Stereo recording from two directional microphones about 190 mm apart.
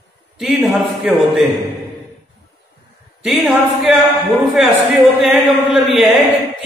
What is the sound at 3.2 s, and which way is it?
A man's voice, centre (ahead or behind).